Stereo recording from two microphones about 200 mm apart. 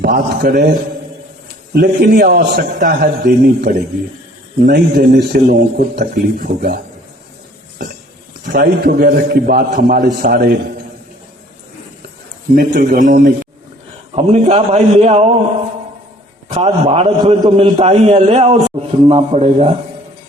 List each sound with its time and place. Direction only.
0.0 s a man's voice: 45° right (ahead or behind)
8.4 s a man's voice: 50° right (ahead or behind)
12.5 s a man's voice: 45° right (ahead or behind)
14.3 s a man's voice: 35° right (ahead or behind)
16.5 s a man's voice: 35° right (ahead or behind)